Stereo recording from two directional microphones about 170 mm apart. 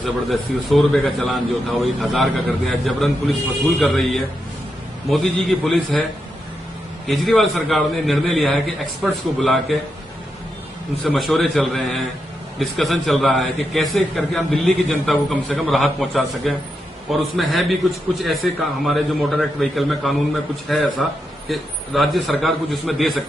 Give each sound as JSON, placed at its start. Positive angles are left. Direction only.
{"t": 0.0, "sound": "a man's voice", "side_deg": 0}
{"t": 7.1, "sound": "a man's voice", "side_deg": 0}
{"t": 11.1, "sound": "a man's voice", "side_deg": 0}